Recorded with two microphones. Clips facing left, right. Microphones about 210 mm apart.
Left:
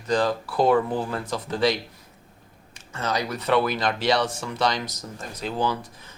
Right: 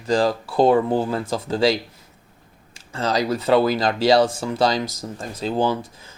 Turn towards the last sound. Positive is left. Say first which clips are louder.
# right 5 dB
turn(degrees=-30)  # may be behind; listen again after turning